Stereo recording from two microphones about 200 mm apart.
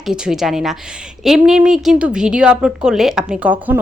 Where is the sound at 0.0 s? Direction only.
Centre (ahead or behind).